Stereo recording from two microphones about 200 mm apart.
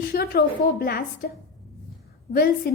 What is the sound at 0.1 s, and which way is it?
Speech, 50° left (ahead or behind).